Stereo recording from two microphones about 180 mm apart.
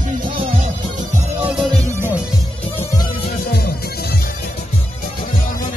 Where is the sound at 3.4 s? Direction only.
60° left (ahead or behind).